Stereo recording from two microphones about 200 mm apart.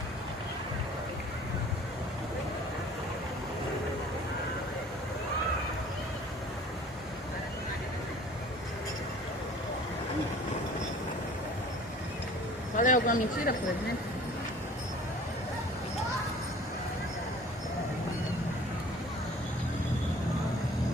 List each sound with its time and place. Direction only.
12.7 s speech: 40° left (ahead or behind)